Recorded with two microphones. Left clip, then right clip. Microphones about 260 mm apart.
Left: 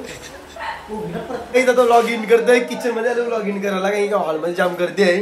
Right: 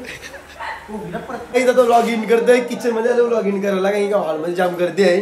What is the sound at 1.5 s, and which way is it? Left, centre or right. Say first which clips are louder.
A man's voice: even; centre.